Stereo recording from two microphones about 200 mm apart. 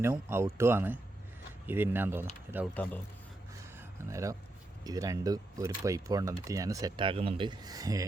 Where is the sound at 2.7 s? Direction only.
5° left (ahead or behind).